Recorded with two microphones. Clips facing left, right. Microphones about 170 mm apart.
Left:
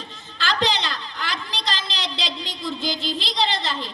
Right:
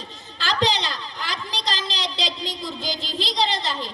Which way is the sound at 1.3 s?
40° right (ahead or behind).